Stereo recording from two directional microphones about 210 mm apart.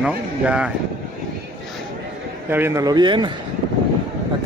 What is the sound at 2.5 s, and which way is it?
Speech, 10° right (ahead or behind).